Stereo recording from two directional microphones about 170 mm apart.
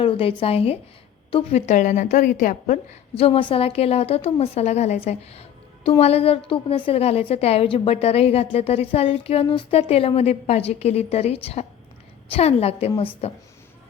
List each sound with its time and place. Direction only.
0.0 s a woman's voice: 35° left (ahead or behind); by 2.7 s 50° left (ahead or behind)
3.2 s a woman's voice: 35° left (ahead or behind)